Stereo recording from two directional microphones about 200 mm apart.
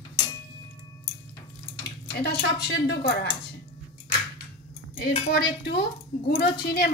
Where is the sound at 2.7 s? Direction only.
60° left (ahead or behind).